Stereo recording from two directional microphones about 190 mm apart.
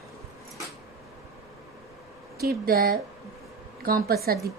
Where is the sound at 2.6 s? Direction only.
50° right (ahead or behind).